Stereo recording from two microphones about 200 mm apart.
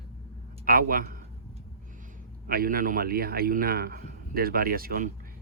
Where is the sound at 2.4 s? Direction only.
50° right (ahead or behind).